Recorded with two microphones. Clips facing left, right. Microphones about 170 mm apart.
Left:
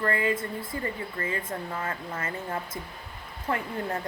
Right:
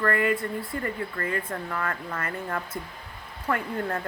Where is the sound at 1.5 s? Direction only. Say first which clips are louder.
Right 2 dB; 25° left (ahead or behind).